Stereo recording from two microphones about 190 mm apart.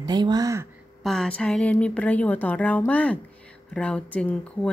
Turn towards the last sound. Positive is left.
turn(degrees=10)  # may be behind; listen again after turning